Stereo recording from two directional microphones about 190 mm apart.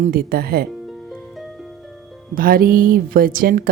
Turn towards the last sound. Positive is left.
turn(degrees=-50)  # may be behind; listen again after turning